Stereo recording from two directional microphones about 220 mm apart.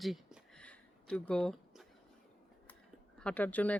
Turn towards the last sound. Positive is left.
turn(degrees=5)  # may be behind; listen again after turning